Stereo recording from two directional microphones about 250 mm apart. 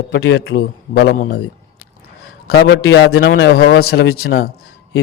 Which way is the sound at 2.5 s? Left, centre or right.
Left.